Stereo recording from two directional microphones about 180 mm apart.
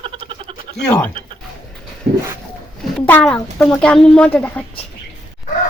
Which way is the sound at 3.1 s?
10° left (ahead or behind).